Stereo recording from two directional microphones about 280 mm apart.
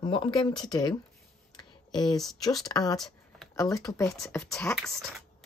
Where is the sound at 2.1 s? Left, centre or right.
Centre.